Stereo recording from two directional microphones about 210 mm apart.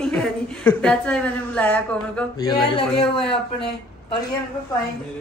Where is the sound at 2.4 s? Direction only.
20° left (ahead or behind).